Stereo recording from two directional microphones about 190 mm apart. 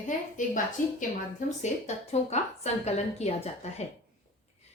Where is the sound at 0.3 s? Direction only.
45° left (ahead or behind).